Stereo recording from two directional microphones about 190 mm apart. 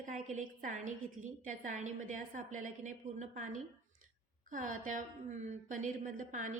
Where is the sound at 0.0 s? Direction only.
40° right (ahead or behind).